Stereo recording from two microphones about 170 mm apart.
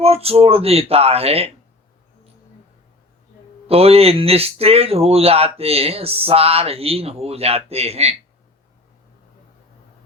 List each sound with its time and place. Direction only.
0.0 s speech: 35° right (ahead or behind)
3.7 s speech: 35° right (ahead or behind)